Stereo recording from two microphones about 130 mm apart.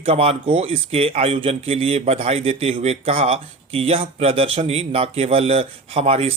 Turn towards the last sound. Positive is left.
turn(degrees=-50)  # may be behind; listen again after turning